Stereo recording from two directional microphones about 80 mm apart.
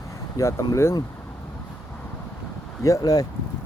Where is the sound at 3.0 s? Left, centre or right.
Left.